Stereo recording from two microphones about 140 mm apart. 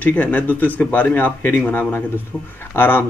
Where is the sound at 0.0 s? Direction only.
10° left (ahead or behind).